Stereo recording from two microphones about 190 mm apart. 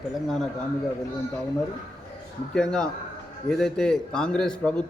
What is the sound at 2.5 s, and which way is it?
A man's voice, 5° left (ahead or behind).